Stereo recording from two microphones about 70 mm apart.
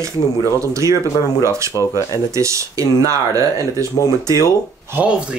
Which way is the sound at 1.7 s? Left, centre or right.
Left.